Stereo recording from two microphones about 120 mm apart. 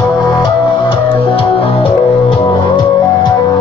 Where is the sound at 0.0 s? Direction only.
35° left (ahead or behind); by 2.1 s 50° left (ahead or behind).